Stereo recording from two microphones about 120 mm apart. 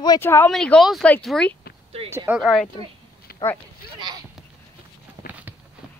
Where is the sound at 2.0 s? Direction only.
20° right (ahead or behind).